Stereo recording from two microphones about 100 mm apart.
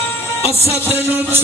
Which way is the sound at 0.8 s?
20° right (ahead or behind).